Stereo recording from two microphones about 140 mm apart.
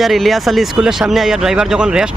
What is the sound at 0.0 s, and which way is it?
A man's voice, centre (ahead or behind).